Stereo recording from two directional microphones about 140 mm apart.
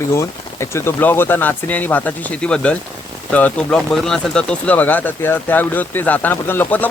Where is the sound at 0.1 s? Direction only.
20° left (ahead or behind).